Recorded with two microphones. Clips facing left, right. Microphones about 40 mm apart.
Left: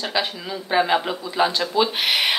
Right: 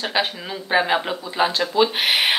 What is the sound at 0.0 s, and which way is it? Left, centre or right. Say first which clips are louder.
Speech: right 2 dB; right.